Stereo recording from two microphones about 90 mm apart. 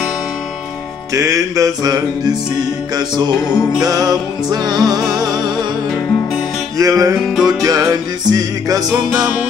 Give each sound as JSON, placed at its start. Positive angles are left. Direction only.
{"t": 1.1, "sound": "music", "side_deg": -35}
{"t": 3.8, "sound": "music", "side_deg": -45}
{"t": 6.8, "sound": "music", "side_deg": -40}
{"t": 7.2, "sound": "music", "side_deg": -5}
{"t": 7.4, "sound": "music", "side_deg": -45}